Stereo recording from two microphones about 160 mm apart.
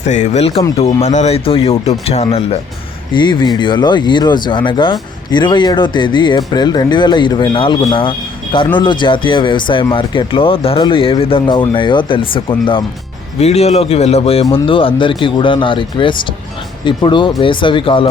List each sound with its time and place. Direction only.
0.0 s speech: 45° left (ahead or behind)
3.2 s speech: 25° left (ahead or behind)